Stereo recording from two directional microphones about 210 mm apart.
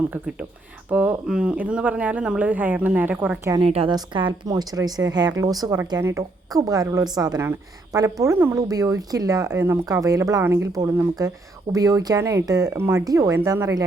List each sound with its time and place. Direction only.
0.9 s a woman's voice: 10° right (ahead or behind)
3.6 s a woman's voice: 25° right (ahead or behind)